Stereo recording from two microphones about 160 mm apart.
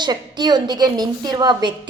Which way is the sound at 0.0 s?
25° right (ahead or behind).